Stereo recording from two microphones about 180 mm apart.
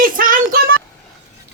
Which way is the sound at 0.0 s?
50° right (ahead or behind).